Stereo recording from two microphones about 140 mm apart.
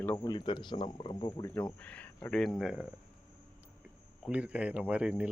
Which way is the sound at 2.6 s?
5° right (ahead or behind).